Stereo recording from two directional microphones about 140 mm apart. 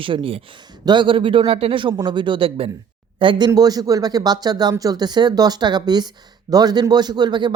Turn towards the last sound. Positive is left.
turn(degrees=-30)  # may be behind; listen again after turning